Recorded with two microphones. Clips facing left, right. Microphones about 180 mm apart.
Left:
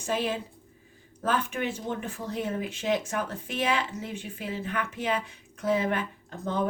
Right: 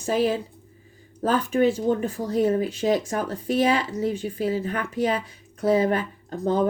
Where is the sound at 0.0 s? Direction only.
40° right (ahead or behind).